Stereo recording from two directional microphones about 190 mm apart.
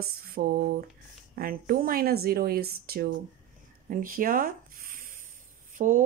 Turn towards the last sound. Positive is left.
turn(degrees=-40)  # may be behind; listen again after turning